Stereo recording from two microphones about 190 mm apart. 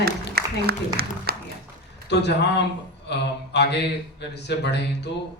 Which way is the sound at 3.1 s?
60° left (ahead or behind).